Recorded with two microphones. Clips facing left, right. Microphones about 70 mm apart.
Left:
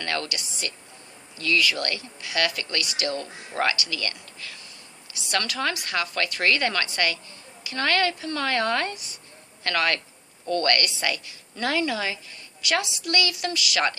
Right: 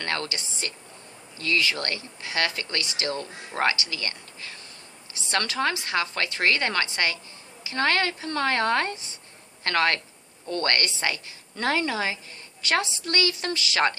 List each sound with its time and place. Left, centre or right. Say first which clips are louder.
0.0 s a woman's voice: even; right